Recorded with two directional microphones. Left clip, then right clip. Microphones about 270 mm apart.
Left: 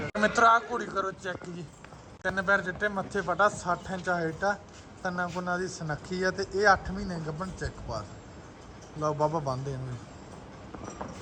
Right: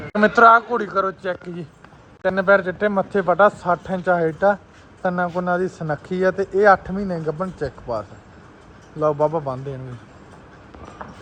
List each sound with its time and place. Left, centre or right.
0.1 s speech: centre